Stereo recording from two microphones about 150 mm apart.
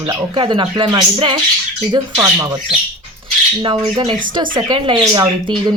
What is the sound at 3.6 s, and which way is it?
Speech, 30° right (ahead or behind).